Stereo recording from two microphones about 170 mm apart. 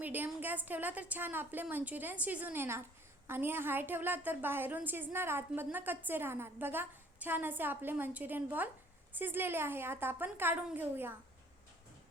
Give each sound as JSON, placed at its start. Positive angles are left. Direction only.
{"t": 0.0, "sound": "a woman's voice", "side_deg": -10}